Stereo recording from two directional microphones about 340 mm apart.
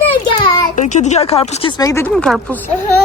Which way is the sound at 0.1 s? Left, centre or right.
Centre.